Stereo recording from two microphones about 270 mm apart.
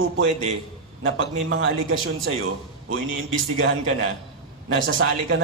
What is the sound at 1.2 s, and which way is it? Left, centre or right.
Speech, right.